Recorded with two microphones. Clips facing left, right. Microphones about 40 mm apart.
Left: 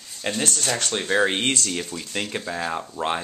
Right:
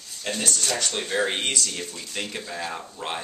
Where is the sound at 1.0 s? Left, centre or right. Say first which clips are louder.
Left 6 dB; left.